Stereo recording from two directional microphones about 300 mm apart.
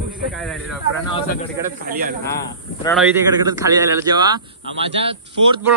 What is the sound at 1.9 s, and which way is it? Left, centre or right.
Speech, right.